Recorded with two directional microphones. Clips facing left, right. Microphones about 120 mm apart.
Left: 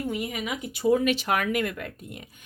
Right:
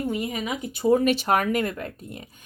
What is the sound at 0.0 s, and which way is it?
Speech, 35° right (ahead or behind).